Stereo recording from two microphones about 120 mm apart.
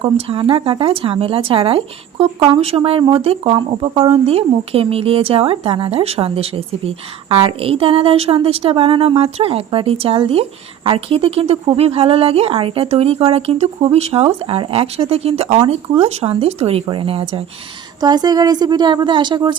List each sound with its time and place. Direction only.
0.0 s speech: 50° right (ahead or behind)
18.0 s a woman's voice: 35° right (ahead or behind)